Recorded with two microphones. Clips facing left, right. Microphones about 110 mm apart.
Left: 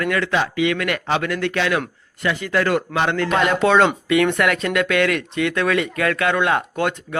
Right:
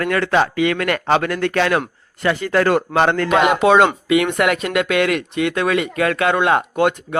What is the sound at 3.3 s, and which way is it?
Speech, 15° right (ahead or behind).